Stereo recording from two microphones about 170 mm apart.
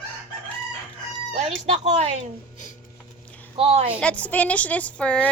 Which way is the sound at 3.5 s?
35° right (ahead or behind).